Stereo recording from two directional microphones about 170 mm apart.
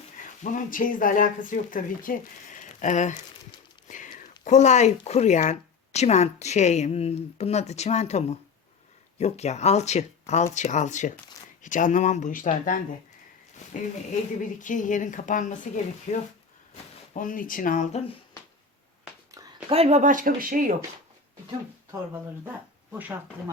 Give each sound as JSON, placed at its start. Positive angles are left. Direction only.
{"t": 0.4, "sound": "speech", "side_deg": 50}
{"t": 14.6, "sound": "speech", "side_deg": 50}
{"t": 17.2, "sound": "speech", "side_deg": 55}
{"t": 19.6, "sound": "speech", "side_deg": -35}
{"t": 22.9, "sound": "speech", "side_deg": -10}